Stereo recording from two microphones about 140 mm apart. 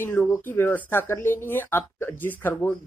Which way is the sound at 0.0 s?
15° left (ahead or behind).